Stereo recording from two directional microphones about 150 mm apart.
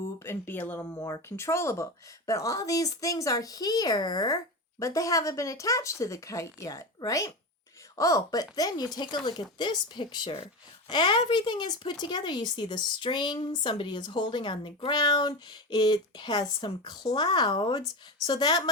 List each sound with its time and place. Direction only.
0.2 s a woman's voice: 15° left (ahead or behind)